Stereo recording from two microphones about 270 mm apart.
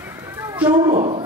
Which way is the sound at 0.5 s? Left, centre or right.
Centre.